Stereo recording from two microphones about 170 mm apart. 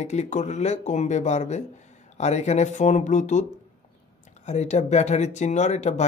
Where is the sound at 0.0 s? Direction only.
40° left (ahead or behind).